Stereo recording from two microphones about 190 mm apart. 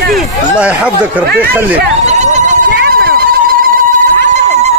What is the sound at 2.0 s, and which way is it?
Goat, 35° right (ahead or behind).